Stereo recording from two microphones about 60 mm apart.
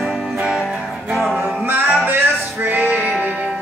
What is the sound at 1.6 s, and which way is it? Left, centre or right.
Music, right.